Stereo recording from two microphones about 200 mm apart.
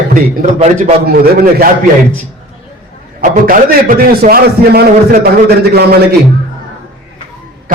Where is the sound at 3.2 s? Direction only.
45° right (ahead or behind).